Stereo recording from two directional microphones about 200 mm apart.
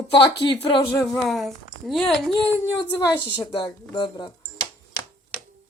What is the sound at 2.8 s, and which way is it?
Speech, 15° left (ahead or behind).